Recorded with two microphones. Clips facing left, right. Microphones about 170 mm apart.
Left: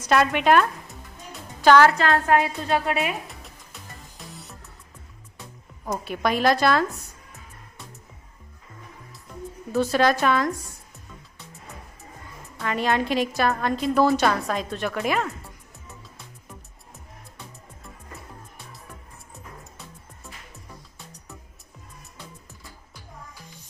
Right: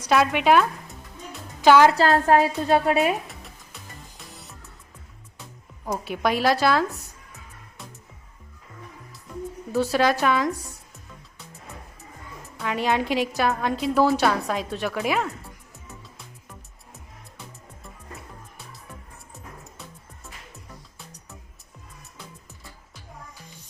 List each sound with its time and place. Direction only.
0.0 s a woman's voice: centre (ahead or behind)
1.9 s a woman's voice: 35° right (ahead or behind)
3.2 s music: centre (ahead or behind)
5.8 s a woman's voice: 10° right (ahead or behind)
9.7 s a woman's voice: 10° right (ahead or behind)
12.5 s a woman's voice: 10° right (ahead or behind)